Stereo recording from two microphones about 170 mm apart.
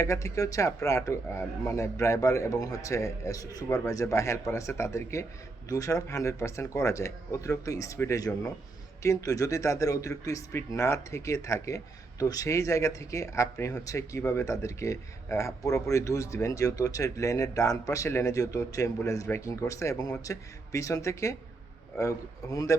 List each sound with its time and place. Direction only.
0.0 s a man's voice: 20° left (ahead or behind)